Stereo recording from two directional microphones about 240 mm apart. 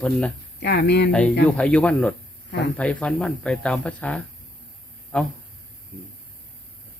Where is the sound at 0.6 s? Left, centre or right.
Left.